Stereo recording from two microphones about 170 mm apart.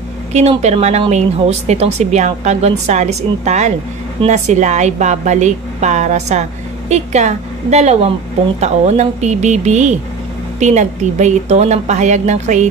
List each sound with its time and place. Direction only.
0.3 s a woman's voice: 40° right (ahead or behind)